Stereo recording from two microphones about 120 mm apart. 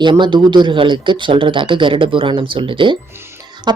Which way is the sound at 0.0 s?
40° right (ahead or behind).